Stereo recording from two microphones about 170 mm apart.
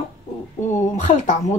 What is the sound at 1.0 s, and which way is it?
Speech, 45° left (ahead or behind).